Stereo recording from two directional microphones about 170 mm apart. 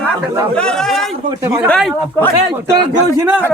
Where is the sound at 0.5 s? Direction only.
5° left (ahead or behind).